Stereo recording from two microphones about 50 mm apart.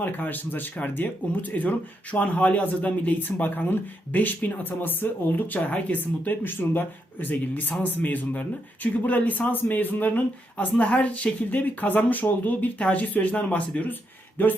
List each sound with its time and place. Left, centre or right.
0.0 s speech: left
14.4 s speech: left